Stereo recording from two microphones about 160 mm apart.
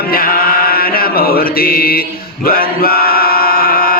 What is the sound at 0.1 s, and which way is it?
Mantra, 65° left (ahead or behind).